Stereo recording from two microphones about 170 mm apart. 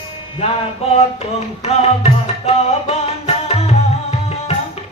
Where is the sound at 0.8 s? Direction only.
35° left (ahead or behind).